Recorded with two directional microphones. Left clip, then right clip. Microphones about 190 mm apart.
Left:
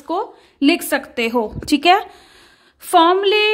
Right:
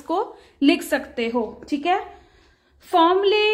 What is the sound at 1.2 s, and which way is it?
Speech, 35° left (ahead or behind).